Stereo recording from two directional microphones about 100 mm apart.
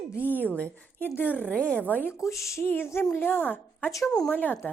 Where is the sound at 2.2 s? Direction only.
30° left (ahead or behind).